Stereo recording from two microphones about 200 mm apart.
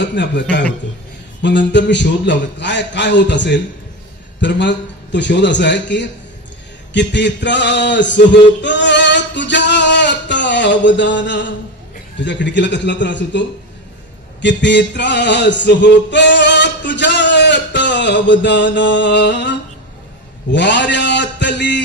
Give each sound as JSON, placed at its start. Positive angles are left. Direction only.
{"t": 0.1, "sound": "a man's voice", "side_deg": 60}
{"t": 6.9, "sound": "a sound", "side_deg": 60}
{"t": 12.2, "sound": "a man's voice", "side_deg": 60}
{"t": 14.4, "sound": "male singing", "side_deg": 60}
{"t": 20.5, "sound": "a man's voice", "side_deg": 60}